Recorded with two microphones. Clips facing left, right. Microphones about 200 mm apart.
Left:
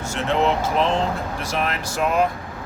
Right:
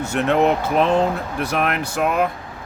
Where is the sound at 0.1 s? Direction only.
60° right (ahead or behind).